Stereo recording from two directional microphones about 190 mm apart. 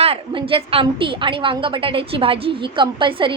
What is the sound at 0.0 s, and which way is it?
A woman's voice, 30° right (ahead or behind).